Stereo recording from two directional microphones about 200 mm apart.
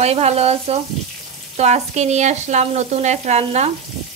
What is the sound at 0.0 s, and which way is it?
Sizzle, 30° right (ahead or behind).